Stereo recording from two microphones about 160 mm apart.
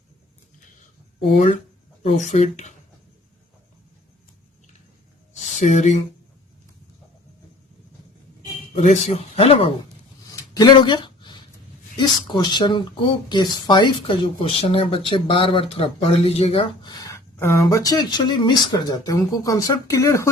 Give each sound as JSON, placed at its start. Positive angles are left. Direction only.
{"t": 2.0, "sound": "speech", "side_deg": 45}
{"t": 5.5, "sound": "speech", "side_deg": 50}
{"t": 8.8, "sound": "speech", "side_deg": 45}
{"t": 10.5, "sound": "a sound", "side_deg": 25}
{"t": 11.9, "sound": "speech", "side_deg": 30}